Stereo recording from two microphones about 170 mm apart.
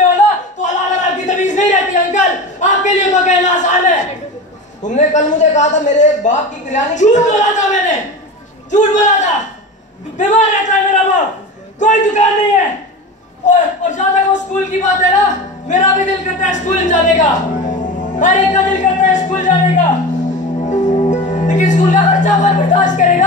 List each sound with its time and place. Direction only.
0.1 s a sound: 45° left (ahead or behind)
4.8 s a man's voice: 45° left (ahead or behind)
13.5 s a man's voice: 45° left (ahead or behind)
20.6 s music: 45° left (ahead or behind)
21.3 s speech: 45° left (ahead or behind)